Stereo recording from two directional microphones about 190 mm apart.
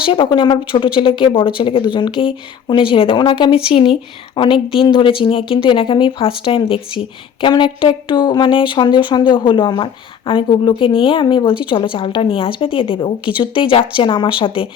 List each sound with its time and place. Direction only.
0.0 s speech: 25° left (ahead or behind)